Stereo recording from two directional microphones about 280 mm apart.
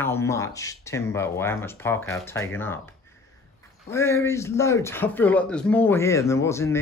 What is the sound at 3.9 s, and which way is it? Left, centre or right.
Speech, centre.